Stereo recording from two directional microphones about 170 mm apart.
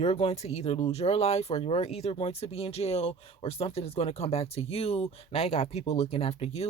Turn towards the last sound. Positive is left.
turn(degrees=35)  # may be behind; listen again after turning